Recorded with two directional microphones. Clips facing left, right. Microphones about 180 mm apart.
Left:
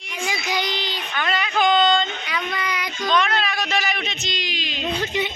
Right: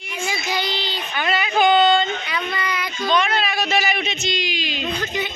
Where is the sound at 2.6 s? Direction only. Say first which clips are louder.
Right 1 dB; 10° left (ahead or behind).